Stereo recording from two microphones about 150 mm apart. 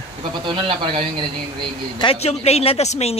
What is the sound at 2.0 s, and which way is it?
Speech, 40° left (ahead or behind).